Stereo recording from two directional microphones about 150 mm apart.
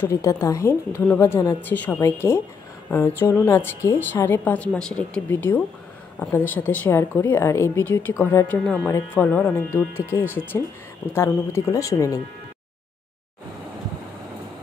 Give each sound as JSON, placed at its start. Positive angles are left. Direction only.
{"t": 0.0, "sound": "a woman's voice", "side_deg": 20}